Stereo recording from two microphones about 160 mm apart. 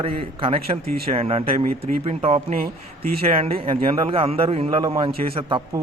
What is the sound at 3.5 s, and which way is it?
A man's voice, 35° right (ahead or behind).